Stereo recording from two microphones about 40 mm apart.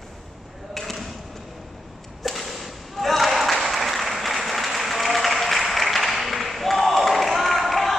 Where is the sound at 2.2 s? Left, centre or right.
Centre.